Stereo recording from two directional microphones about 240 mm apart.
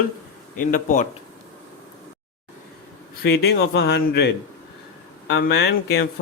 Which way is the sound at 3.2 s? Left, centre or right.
Left.